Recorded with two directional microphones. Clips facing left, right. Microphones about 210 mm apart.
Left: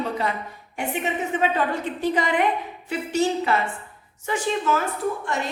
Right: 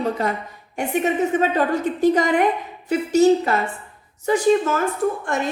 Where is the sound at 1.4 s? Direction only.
40° right (ahead or behind).